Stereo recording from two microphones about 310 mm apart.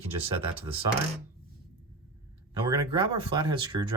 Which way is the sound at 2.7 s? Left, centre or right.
Centre.